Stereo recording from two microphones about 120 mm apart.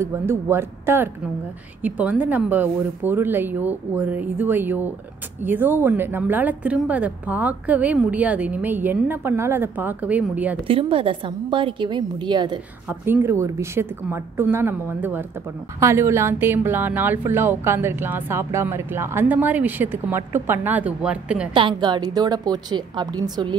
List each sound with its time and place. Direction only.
0.0 s a woman's voice: 20° right (ahead or behind)
10.7 s a woman's voice: 50° right (ahead or behind)
13.0 s a woman's voice: 20° right (ahead or behind)
21.5 s a woman's voice: 40° right (ahead or behind)